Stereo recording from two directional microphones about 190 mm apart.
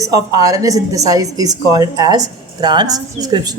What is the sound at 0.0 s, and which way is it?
A woman's voice, 20° right (ahead or behind).